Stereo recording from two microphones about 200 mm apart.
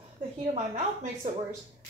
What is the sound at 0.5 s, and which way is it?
Speech, 35° right (ahead or behind).